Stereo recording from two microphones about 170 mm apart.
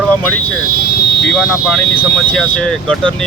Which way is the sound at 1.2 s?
5° left (ahead or behind).